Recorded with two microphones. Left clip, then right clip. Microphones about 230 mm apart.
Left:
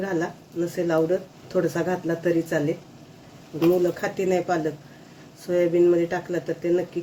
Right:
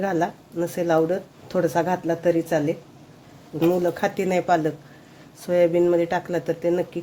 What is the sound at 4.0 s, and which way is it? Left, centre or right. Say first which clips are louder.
Speech: right 1 dB; right.